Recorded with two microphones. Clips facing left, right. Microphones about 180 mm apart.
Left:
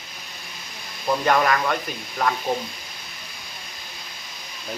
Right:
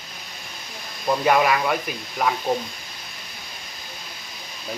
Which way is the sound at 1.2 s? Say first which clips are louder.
Right 1 dB; 5° right (ahead or behind).